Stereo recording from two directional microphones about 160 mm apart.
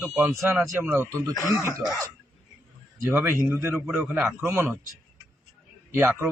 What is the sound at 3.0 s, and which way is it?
Speech, 15° right (ahead or behind).